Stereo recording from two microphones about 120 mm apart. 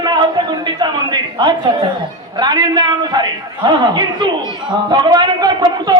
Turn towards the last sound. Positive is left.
turn(degrees=-35)  # may be behind; listen again after turning